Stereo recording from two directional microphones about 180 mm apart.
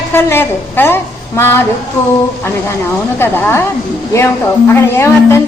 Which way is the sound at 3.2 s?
10° left (ahead or behind).